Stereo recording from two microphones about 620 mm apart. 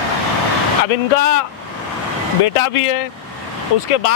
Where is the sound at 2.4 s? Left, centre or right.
Left.